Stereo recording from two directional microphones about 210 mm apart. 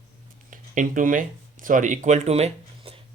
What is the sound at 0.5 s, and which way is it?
Speech, 40° right (ahead or behind).